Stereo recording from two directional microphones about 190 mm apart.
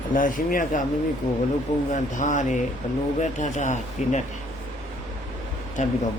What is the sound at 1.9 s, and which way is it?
Speech, 40° left (ahead or behind).